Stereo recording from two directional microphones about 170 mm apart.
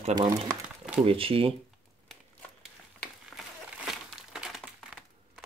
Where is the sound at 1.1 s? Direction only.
30° right (ahead or behind).